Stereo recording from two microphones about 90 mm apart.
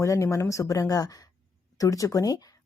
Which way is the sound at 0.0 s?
35° left (ahead or behind).